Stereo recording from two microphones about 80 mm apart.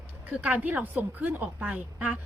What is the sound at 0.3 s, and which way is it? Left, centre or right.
A woman's voice, centre.